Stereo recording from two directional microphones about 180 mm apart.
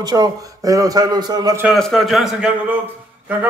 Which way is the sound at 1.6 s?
Centre (ahead or behind).